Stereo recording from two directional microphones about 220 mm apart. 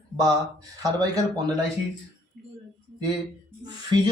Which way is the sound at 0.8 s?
15° right (ahead or behind).